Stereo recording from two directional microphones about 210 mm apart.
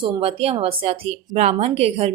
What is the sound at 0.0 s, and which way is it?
Speech, 25° right (ahead or behind).